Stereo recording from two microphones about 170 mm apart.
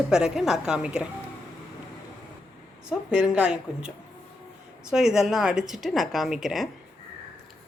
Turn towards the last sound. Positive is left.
turn(degrees=0)  # may be behind; listen again after turning